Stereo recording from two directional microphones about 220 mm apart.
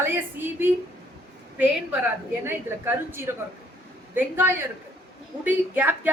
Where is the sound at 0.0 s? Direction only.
10° right (ahead or behind).